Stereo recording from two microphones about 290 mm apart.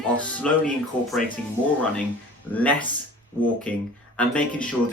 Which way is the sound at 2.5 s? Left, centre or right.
Centre.